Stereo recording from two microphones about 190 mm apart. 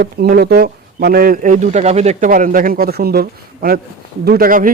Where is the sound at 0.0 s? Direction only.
55° right (ahead or behind).